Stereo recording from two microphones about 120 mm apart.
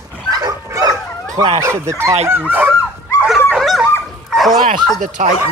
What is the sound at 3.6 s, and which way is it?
Dog, centre (ahead or behind).